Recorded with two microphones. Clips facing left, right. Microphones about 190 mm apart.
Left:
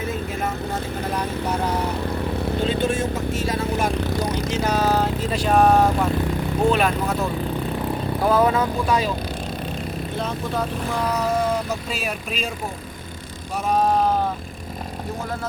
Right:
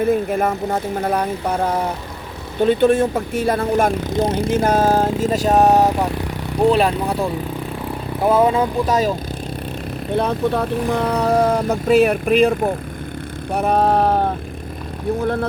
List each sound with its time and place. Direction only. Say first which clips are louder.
0.0 s speech: right 9 dB; 55° right (ahead or behind)
4.1 s speech: right 5 dB; 25° right (ahead or behind)
4.4 s speech: right 4 dB; 50° right (ahead or behind)
5.5 s speech: right 2 dB; 20° right (ahead or behind)
6.6 s speech: right 5 dB; 35° right (ahead or behind)
8.9 s speech: right 3 dB; 45° right (ahead or behind)
10.2 s speech: right 8 dB; 60° right (ahead or behind)
13.5 s vehicle: right 4 dB; 60° right (ahead or behind)
15.2 s speech: right 10 dB; 60° right (ahead or behind)